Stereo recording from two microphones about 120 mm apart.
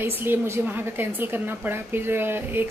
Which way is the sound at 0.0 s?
20° right (ahead or behind).